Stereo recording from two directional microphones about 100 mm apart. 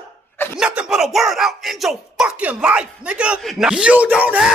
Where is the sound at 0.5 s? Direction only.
10° right (ahead or behind).